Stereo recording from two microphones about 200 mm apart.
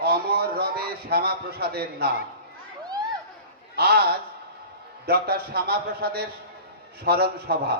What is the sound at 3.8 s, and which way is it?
A man's voice, 50° right (ahead or behind).